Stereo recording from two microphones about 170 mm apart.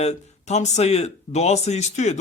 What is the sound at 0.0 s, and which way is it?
A man's voice, 40° left (ahead or behind).